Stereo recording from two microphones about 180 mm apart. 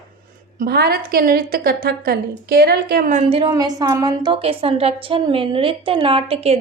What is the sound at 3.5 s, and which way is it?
A woman's voice, 20° right (ahead or behind).